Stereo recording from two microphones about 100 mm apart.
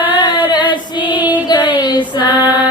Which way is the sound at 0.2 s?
50° left (ahead or behind).